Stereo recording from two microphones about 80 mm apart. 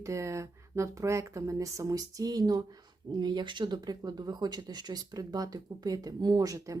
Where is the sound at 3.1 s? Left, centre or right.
Right.